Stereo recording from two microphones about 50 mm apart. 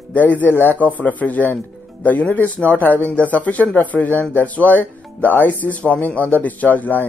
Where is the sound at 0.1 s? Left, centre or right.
Left.